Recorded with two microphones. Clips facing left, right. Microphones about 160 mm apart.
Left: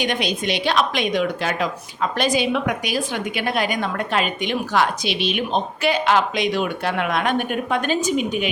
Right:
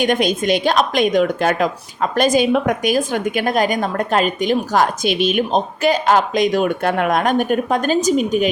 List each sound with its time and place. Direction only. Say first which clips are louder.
0.0 s a woman's voice: right 6 dB; 45° right (ahead or behind)